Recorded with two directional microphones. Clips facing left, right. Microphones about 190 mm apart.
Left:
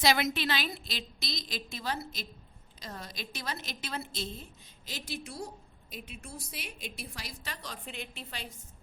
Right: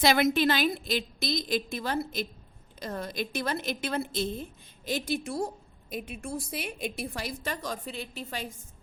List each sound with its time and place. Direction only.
0.0 s a woman's voice: 55° right (ahead or behind)